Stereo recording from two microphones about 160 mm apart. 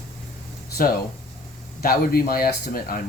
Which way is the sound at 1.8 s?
70° left (ahead or behind).